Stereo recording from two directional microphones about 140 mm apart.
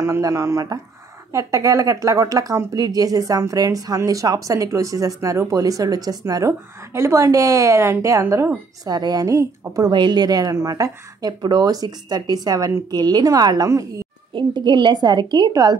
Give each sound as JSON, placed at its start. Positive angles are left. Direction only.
{"t": 0.0, "sound": "a woman's voice", "side_deg": -20}